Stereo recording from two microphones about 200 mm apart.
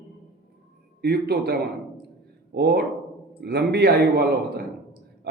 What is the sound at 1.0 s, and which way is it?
A man's voice, 55° right (ahead or behind).